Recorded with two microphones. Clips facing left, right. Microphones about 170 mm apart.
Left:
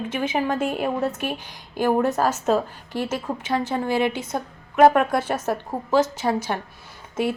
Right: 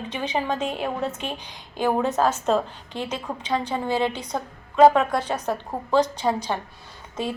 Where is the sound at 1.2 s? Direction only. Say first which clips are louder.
Left 4 dB; 20° right (ahead or behind).